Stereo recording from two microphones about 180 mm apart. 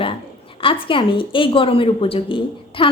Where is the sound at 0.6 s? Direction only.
30° left (ahead or behind).